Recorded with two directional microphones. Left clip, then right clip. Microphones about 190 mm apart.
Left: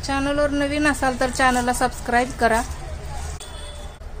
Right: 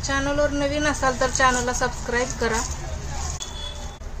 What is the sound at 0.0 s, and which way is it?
Speech, 45° left (ahead or behind).